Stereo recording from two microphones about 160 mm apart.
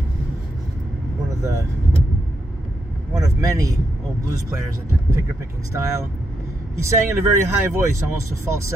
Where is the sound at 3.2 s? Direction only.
20° right (ahead or behind).